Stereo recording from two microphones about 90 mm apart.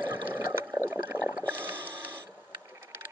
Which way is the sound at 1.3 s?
20° right (ahead or behind).